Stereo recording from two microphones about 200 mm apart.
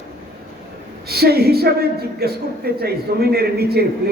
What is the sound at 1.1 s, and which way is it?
A man's voice, 50° right (ahead or behind).